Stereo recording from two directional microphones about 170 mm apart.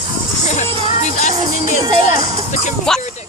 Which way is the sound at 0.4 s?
45° left (ahead or behind).